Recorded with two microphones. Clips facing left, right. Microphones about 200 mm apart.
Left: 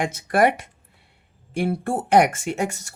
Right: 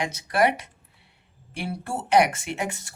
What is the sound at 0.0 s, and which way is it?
Speech, 50° left (ahead or behind).